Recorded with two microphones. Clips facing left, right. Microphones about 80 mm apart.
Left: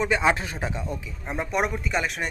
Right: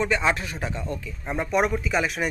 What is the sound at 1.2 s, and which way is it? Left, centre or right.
Speech, centre.